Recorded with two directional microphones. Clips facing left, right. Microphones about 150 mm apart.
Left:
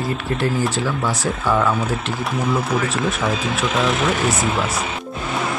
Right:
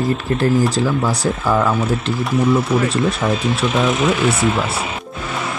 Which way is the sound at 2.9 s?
35° right (ahead or behind).